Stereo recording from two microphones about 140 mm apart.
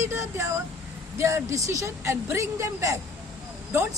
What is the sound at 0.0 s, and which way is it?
A woman's voice, 20° right (ahead or behind).